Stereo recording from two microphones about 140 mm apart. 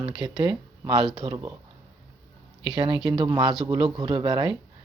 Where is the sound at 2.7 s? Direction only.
35° right (ahead or behind).